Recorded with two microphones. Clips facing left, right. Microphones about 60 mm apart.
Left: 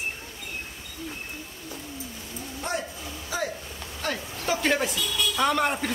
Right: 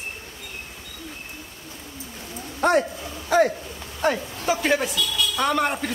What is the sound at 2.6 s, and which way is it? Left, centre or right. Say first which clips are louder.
Speech: right 12 dB; right.